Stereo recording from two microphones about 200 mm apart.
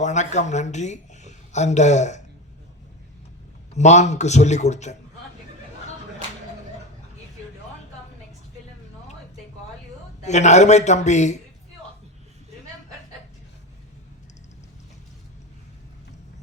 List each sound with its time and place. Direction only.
0.0 s a woman's voice: 35° left (ahead or behind)
3.8 s a man's voice: 35° left (ahead or behind)
10.2 s a man's voice: 35° left (ahead or behind)